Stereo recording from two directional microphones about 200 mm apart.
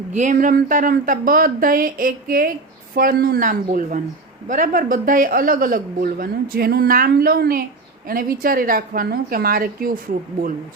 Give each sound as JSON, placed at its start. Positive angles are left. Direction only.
{"t": 0.1, "sound": "a man's voice", "side_deg": -40}